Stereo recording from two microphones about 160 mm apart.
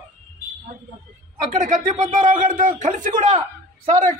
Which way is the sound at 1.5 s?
50° right (ahead or behind).